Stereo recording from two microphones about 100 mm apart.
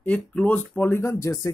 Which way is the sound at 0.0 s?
10° left (ahead or behind).